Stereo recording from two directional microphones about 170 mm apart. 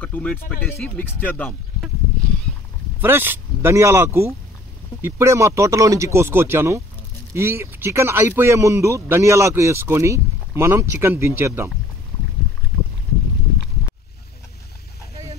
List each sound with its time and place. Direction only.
0.0 s speech: 10° left (ahead or behind)
3.0 s speech: 15° right (ahead or behind)